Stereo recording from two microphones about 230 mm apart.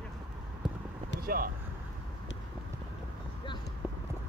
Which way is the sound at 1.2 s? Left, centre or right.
Right.